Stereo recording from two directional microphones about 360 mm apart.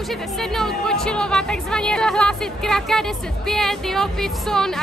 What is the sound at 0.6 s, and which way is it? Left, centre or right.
Speech, centre.